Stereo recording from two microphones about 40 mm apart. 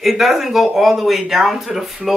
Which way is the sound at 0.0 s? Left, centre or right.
Centre.